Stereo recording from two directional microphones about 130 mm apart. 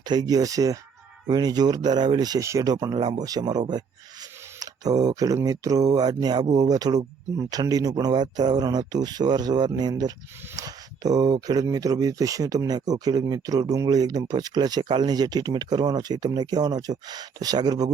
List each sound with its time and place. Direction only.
0.0 s speech: 30° right (ahead or behind)